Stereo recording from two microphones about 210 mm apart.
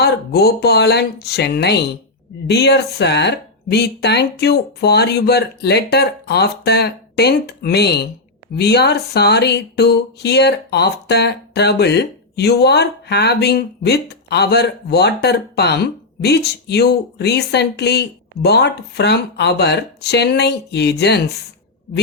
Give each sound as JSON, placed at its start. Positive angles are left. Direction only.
{"t": 0.0, "sound": "speech", "side_deg": 50}